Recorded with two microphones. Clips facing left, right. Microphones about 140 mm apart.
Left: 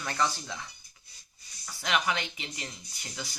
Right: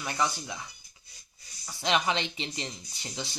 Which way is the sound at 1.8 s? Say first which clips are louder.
Right 2 dB; 25° right (ahead or behind).